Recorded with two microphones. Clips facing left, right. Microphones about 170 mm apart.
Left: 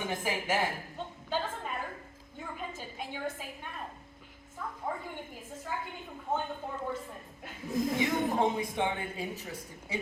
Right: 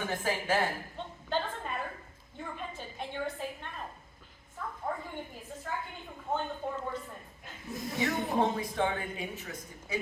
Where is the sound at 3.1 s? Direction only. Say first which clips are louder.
Right 3 dB; 10° left (ahead or behind).